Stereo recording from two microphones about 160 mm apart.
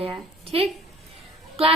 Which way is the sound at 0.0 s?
35° right (ahead or behind).